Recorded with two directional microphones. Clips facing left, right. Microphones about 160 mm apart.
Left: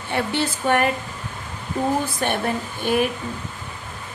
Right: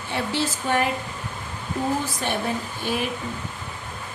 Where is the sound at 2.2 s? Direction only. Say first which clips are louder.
Left 4 dB; 60° left (ahead or behind).